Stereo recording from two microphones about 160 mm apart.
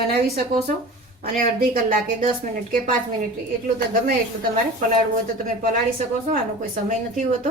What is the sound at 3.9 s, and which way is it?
Speech, 65° right (ahead or behind).